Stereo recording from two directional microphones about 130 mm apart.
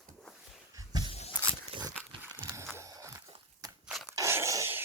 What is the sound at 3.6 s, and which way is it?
Crunch, 30° right (ahead or behind).